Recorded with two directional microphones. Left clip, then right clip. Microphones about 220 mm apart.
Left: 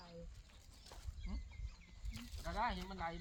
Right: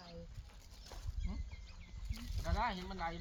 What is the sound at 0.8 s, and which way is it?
Horse, 10° left (ahead or behind).